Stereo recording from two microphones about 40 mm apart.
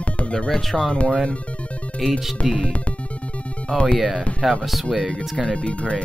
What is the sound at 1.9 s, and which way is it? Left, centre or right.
Speech, centre.